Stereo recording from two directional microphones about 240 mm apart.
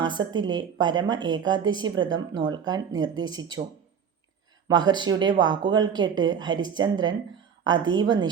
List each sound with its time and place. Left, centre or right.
0.2 s a woman's voice: centre
4.7 s a woman's voice: centre